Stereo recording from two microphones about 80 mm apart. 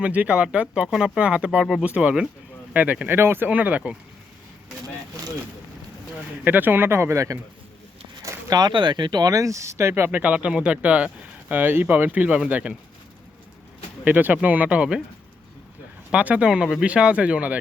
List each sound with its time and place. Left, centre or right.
0.0 s speech: centre
3.2 s speech: right
3.5 s speech: centre
6.4 s speech: right
8.2 s a sound: right
8.7 s speech: right; by 12.7 s centre
14.0 s speech: centre
16.1 s speech: centre